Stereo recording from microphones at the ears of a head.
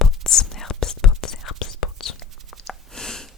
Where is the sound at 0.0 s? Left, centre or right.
Left.